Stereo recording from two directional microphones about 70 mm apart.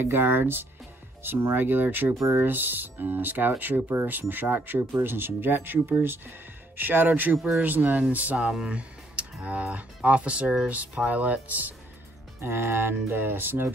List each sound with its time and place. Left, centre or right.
0.0 s speech: right
7.3 s speech: centre
7.6 s speech: right
8.4 s speech: centre
9.4 s speech: centre
12.4 s speech: right